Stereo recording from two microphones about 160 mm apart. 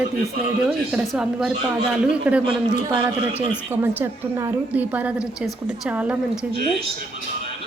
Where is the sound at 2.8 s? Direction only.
20° right (ahead or behind); by 6.8 s 5° right (ahead or behind).